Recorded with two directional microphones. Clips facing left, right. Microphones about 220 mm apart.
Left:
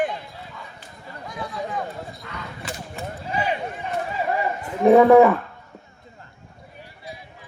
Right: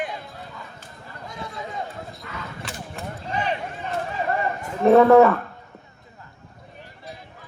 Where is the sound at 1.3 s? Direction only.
25° right (ahead or behind).